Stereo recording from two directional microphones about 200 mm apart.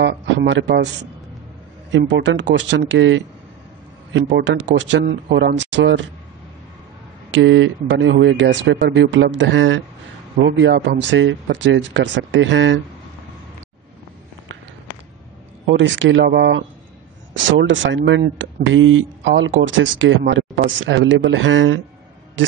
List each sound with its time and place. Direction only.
0.0 s a sound: 60° right (ahead or behind)
1.9 s speech: 65° right (ahead or behind)
7.2 s speech: 70° right (ahead or behind)
15.6 s speech: 65° right (ahead or behind)
17.5 s speech: 70° right (ahead or behind)